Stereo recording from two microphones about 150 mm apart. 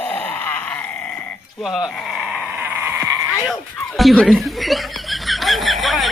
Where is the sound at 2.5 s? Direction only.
10° right (ahead or behind).